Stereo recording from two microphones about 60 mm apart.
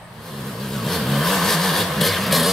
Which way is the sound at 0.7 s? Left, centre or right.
Centre.